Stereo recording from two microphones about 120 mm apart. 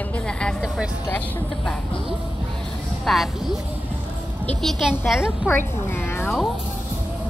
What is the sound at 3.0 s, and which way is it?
Speech, centre (ahead or behind).